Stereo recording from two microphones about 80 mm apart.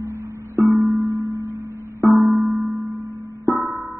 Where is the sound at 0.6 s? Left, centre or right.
Right.